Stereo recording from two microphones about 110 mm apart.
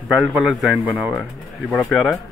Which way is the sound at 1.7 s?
Centre (ahead or behind).